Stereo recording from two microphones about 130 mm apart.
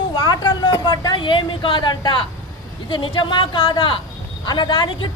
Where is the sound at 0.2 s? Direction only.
40° left (ahead or behind).